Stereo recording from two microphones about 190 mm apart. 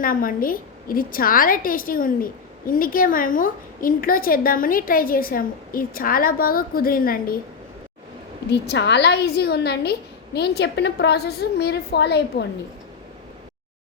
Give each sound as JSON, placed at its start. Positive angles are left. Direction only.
{"t": 0.0, "sound": "a woman's voice", "side_deg": 45}
{"t": 8.4, "sound": "a woman's voice", "side_deg": 60}